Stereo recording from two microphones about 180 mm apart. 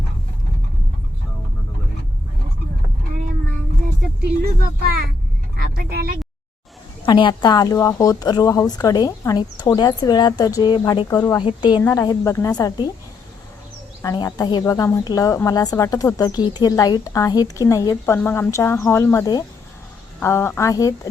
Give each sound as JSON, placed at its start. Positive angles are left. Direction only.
{"t": 5.5, "sound": "vehicle", "side_deg": -55}
{"t": 7.0, "sound": "a woman's voice", "side_deg": 25}
{"t": 14.0, "sound": "a woman's voice", "side_deg": 20}